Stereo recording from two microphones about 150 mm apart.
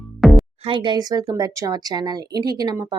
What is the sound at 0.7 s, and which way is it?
Speech, 30° right (ahead or behind).